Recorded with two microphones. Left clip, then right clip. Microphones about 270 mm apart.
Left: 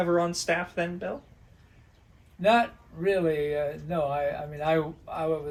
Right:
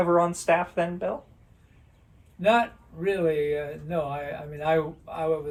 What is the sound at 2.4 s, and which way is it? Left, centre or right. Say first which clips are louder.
Speech: right 1 dB; centre.